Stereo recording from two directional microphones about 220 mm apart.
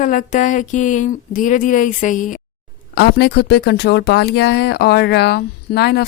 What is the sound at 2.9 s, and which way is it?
Speech, 50° left (ahead or behind).